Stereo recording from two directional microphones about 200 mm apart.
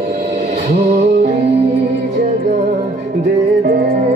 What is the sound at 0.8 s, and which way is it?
Music, 30° right (ahead or behind).